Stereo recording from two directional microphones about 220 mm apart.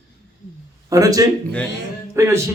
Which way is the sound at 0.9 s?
15° right (ahead or behind).